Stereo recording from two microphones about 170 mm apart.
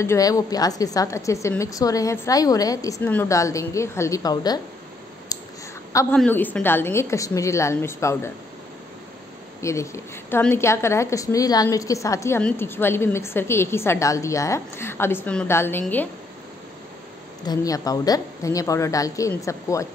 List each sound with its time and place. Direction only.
0.0 s a woman's voice: 20° left (ahead or behind)
5.3 s a sound: 20° left (ahead or behind)
6.1 s a woman's voice: 10° left (ahead or behind)
9.6 s a woman's voice: 15° left (ahead or behind)
17.5 s a woman's voice: 20° left (ahead or behind)